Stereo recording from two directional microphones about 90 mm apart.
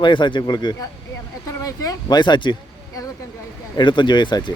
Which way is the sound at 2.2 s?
60° left (ahead or behind).